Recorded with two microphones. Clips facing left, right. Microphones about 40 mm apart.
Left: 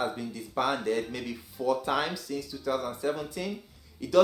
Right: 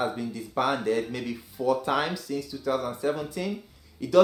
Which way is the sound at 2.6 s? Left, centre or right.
Right.